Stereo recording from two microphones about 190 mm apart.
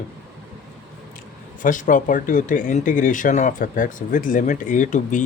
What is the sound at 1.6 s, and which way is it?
Speech, 45° left (ahead or behind).